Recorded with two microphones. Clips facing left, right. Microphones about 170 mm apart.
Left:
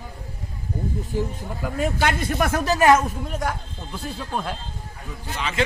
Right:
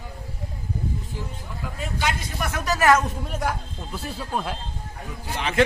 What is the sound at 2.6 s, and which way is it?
Speech, 25° left (ahead or behind).